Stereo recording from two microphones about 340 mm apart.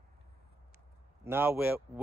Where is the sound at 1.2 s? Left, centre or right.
Centre.